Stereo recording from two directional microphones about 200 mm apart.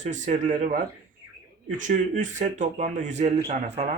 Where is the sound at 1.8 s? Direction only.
40° right (ahead or behind).